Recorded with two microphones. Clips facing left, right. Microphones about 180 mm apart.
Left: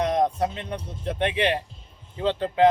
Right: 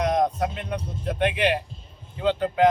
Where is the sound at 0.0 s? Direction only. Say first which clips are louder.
Even; 30° left (ahead or behind).